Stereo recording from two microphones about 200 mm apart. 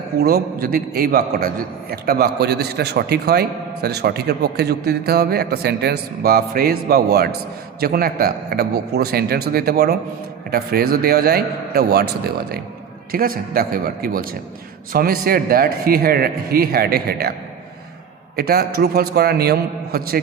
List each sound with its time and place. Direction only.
0.2 s a man's voice: 50° right (ahead or behind)
18.3 s a man's voice: 50° right (ahead or behind)